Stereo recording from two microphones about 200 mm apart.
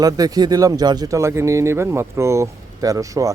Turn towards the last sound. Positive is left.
turn(degrees=-15)  # may be behind; listen again after turning